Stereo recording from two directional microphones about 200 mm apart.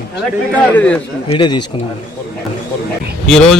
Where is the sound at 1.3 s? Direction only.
25° left (ahead or behind).